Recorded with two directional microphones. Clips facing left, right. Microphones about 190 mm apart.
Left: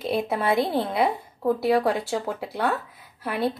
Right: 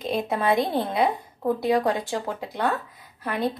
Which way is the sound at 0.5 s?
20° right (ahead or behind).